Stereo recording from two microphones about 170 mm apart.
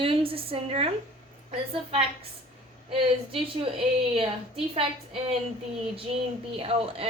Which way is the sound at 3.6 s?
35° right (ahead or behind).